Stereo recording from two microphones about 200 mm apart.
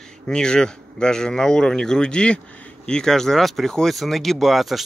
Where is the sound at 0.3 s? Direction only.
5° left (ahead or behind).